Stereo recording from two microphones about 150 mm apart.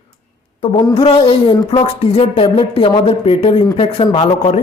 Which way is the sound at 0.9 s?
40° left (ahead or behind).